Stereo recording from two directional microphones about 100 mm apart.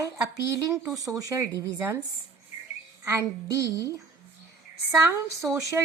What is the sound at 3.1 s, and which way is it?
Speech, 35° right (ahead or behind).